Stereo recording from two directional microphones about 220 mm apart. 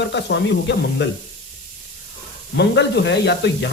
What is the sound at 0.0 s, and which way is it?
Speech, 55° left (ahead or behind).